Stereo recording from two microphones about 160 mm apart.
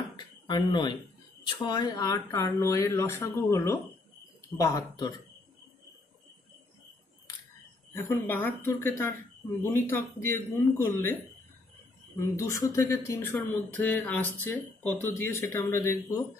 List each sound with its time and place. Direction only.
0.1 s speech: 25° left (ahead or behind)
7.9 s speech: 15° left (ahead or behind)
12.4 s speech: 20° left (ahead or behind)